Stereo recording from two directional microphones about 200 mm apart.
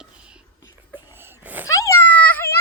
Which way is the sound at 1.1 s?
10° right (ahead or behind).